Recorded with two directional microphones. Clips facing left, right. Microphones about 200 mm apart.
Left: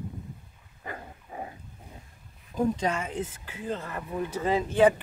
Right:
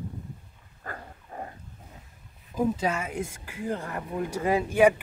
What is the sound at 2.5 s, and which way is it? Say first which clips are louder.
Speech: even; 5° right (ahead or behind).